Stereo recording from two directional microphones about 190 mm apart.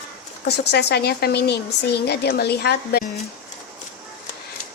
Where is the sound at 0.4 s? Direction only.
60° left (ahead or behind).